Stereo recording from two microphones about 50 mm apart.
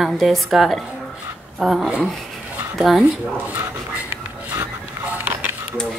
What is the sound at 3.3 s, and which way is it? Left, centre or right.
Speech, right.